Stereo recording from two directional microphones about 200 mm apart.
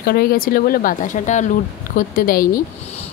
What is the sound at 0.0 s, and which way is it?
Speech, 50° left (ahead or behind).